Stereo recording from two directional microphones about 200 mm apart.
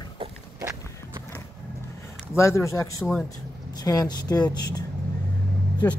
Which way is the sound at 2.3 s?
15° left (ahead or behind).